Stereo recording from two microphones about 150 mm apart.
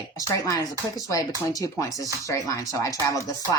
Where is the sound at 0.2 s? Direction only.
25° left (ahead or behind).